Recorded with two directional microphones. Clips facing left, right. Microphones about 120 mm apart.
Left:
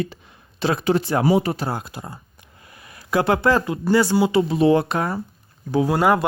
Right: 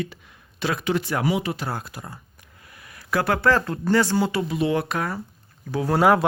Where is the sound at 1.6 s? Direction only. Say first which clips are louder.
Left 3 dB; 25° left (ahead or behind); by 4.3 s 10° left (ahead or behind).